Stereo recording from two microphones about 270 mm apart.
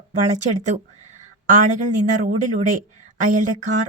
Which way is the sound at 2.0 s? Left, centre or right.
Right.